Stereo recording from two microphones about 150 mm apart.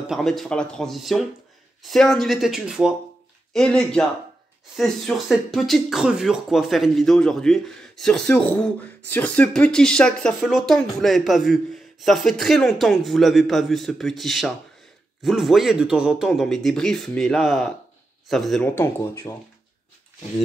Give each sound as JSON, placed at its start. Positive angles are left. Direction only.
{"t": 0.0, "sound": "speech", "side_deg": 0}
{"t": 18.8, "sound": "speech", "side_deg": 15}